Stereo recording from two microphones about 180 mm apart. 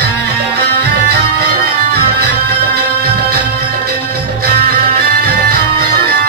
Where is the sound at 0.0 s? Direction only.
65° right (ahead or behind).